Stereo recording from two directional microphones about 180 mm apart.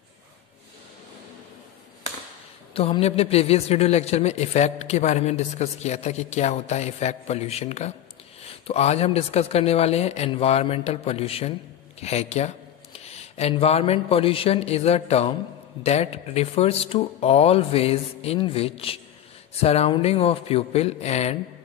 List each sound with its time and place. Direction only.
2.7 s a man's voice: 30° left (ahead or behind)